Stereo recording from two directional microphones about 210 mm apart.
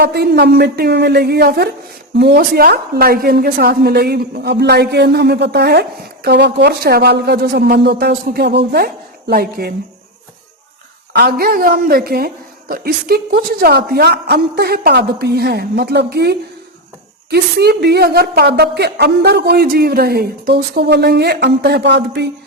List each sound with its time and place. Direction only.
0.0 s a woman's voice: 50° right (ahead or behind)
11.1 s a woman's voice: 50° right (ahead or behind)